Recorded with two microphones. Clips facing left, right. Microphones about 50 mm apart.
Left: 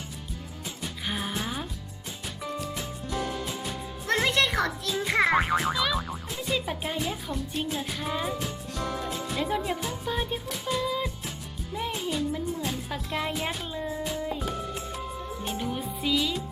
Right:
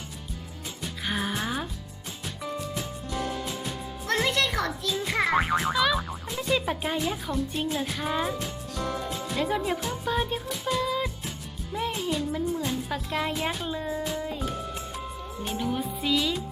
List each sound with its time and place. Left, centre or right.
0.8 s music: centre
2.7 s music: centre
4.0 s music: left
5.4 s speech: centre
7.0 s music: centre
15.5 s speech: centre
16.0 s music: centre